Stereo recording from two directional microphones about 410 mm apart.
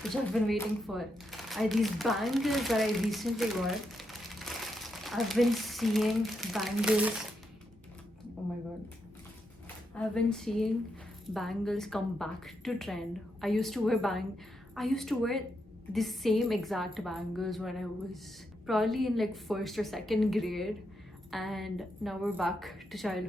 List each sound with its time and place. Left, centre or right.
0.0 s speech: centre
9.9 s a woman's voice: centre